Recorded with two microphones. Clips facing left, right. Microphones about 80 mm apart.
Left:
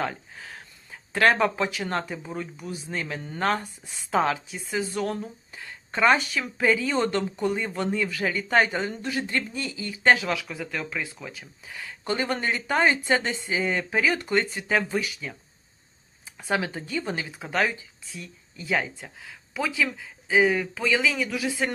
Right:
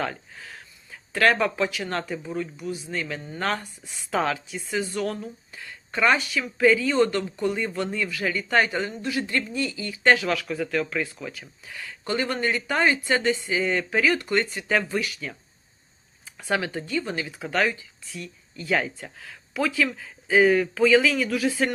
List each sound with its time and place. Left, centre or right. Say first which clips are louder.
0.0 s speech: even; left; by 11.3 s centre
11.3 s speech: right 2 dB; left
16.4 s speech: right 1 dB; left; by 21.7 s centre